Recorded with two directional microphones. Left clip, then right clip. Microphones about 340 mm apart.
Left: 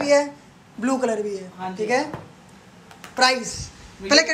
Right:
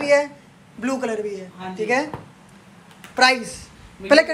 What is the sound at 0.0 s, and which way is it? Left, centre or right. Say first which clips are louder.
Speech: right 1 dB; centre.